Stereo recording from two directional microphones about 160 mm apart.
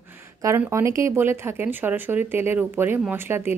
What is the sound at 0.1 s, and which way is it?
Speech, 15° right (ahead or behind).